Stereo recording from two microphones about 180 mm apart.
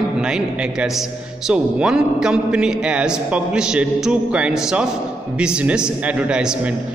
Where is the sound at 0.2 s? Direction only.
5° right (ahead or behind).